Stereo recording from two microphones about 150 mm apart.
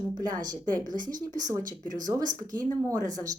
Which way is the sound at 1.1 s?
60° right (ahead or behind).